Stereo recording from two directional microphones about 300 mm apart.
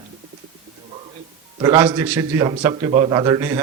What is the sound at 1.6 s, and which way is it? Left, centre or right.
A man's voice, centre.